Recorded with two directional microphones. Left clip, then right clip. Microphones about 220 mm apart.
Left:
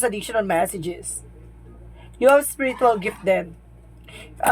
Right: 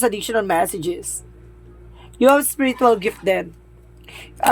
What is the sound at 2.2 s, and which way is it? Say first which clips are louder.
Speech: right 1 dB; 50° right (ahead or behind).